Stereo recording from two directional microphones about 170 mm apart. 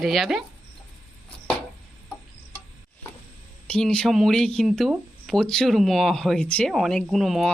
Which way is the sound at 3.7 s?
5° left (ahead or behind).